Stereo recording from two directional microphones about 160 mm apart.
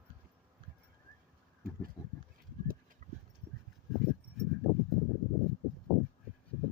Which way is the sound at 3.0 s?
50° right (ahead or behind).